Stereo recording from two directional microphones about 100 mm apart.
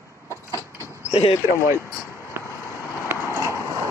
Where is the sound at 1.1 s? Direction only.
90° left.